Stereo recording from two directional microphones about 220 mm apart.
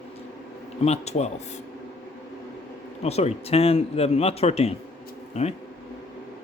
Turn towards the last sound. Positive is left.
turn(degrees=30)  # may be behind; listen again after turning